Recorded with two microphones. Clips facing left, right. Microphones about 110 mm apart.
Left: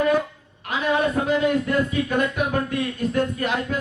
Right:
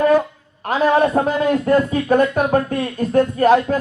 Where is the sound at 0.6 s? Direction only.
40° right (ahead or behind).